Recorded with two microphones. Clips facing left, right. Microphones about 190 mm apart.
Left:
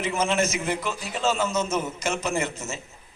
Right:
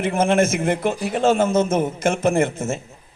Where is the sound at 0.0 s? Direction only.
55° right (ahead or behind).